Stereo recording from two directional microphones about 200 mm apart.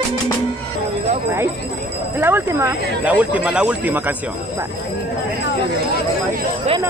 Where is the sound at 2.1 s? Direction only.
10° right (ahead or behind).